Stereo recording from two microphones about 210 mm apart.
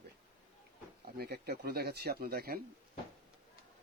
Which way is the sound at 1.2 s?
50° right (ahead or behind).